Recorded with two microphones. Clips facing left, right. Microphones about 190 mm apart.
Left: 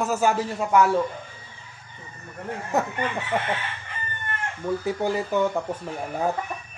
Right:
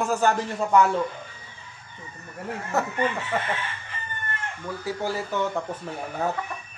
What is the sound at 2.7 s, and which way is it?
Speech, 15° left (ahead or behind).